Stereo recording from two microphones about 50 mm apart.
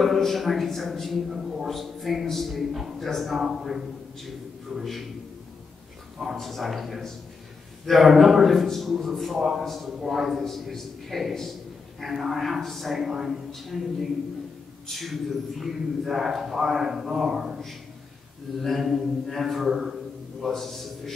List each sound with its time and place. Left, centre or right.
0.0 s a man's voice: centre
4.7 s a man's voice: centre
6.3 s a man's voice: centre
18.6 s a man's voice: centre